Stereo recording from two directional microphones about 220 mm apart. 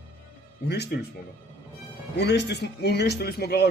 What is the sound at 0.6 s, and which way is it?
Speech, 50° left (ahead or behind).